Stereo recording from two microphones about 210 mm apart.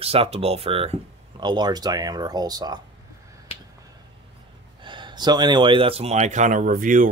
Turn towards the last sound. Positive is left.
turn(degrees=-40)  # may be behind; listen again after turning